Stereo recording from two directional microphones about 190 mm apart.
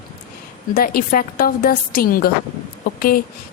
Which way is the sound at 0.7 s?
50° left (ahead or behind).